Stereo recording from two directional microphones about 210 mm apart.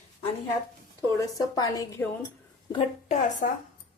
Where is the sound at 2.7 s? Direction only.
30° left (ahead or behind).